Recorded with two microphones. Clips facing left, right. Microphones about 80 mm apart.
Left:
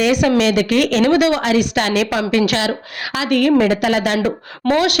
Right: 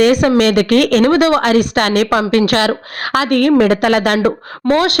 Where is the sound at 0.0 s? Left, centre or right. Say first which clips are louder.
Right 4 dB; right.